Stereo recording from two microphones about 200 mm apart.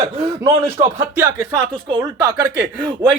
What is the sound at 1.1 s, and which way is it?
Speech, 10° right (ahead or behind).